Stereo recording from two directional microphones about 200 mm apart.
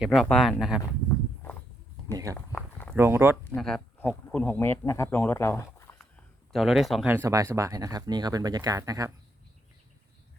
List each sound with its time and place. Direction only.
0.0 s speech: centre (ahead or behind)
0.8 s walk: 15° left (ahead or behind)
2.1 s a sound: 15° right (ahead or behind)
2.9 s speech: 10° right (ahead or behind)
3.5 s speech: 5° left (ahead or behind)
6.5 s speech: centre (ahead or behind); by 9.1 s 15° right (ahead or behind)